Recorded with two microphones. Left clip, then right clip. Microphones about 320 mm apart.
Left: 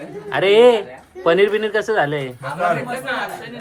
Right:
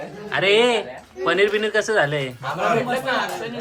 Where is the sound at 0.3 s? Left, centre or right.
Centre.